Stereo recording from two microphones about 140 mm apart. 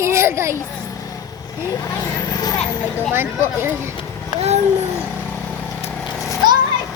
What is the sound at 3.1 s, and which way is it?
Speech, 15° right (ahead or behind).